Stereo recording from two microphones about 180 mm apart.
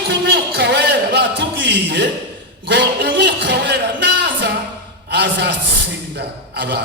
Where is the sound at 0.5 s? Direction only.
65° right (ahead or behind).